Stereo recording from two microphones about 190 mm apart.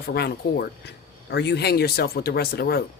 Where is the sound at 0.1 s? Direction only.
55° left (ahead or behind).